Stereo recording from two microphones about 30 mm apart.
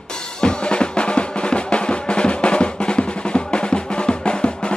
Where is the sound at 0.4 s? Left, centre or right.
Left.